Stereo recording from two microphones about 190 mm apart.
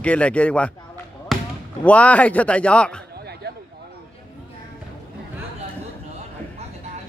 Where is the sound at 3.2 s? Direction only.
60° right (ahead or behind).